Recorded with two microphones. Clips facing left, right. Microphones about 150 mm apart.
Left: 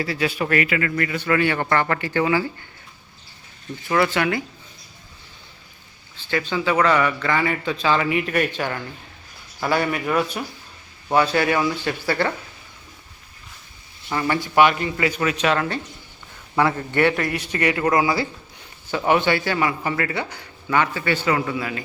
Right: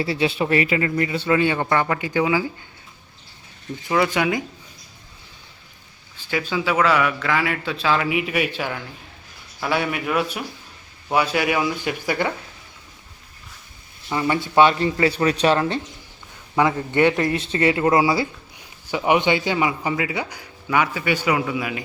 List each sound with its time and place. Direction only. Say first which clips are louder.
0.0 s speech: right 2 dB; 30° right (ahead or behind); by 2.5 s 10° right (ahead or behind)
3.8 s speech: even; 15° right (ahead or behind)
6.1 s a man's voice: even; 10° right (ahead or behind)
14.1 s speech: right 1 dB; 20° right (ahead or behind)
16.6 s speech: right 1 dB; 15° right (ahead or behind)
18.9 s speech: even; 15° right (ahead or behind)